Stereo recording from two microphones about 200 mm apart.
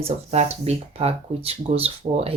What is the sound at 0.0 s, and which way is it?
Speech, 35° right (ahead or behind).